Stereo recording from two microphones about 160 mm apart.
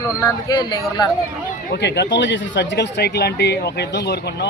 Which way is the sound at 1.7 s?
90° left.